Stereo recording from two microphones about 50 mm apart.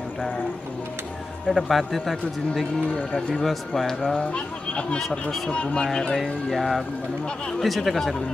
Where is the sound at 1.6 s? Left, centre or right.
Centre.